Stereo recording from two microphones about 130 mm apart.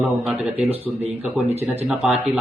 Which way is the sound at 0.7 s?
55° right (ahead or behind).